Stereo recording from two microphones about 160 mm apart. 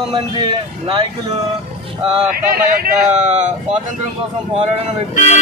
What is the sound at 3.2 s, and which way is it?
Speech, 45° right (ahead or behind).